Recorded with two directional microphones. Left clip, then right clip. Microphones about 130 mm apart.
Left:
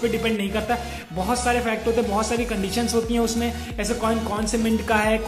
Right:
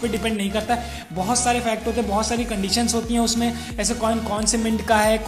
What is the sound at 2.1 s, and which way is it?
Speech, 40° right (ahead or behind).